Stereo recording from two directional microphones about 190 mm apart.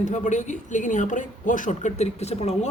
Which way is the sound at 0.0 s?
40° left (ahead or behind).